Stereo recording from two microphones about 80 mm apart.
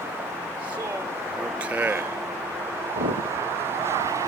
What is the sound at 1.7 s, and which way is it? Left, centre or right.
Speech, right.